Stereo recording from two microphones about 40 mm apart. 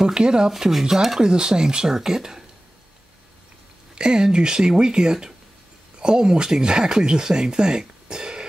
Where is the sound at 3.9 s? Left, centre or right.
Centre.